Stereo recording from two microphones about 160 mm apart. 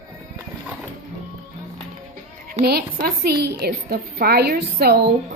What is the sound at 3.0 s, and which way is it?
A woman's voice, 85° right.